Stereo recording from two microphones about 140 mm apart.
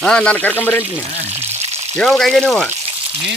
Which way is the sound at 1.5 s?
50° right (ahead or behind).